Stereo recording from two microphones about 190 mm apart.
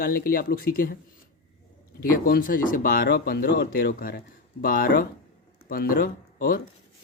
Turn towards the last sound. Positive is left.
turn(degrees=50)  # may be behind; listen again after turning